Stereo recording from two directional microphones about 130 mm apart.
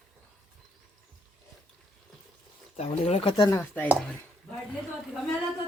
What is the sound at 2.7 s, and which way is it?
Speech, 50° left (ahead or behind).